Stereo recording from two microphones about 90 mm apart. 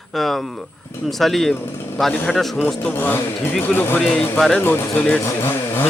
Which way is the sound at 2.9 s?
25° left (ahead or behind).